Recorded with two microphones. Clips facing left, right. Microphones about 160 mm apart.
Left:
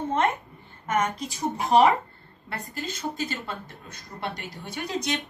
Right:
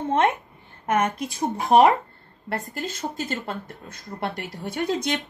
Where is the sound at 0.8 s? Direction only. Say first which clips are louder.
Right 3 dB; 55° right (ahead or behind).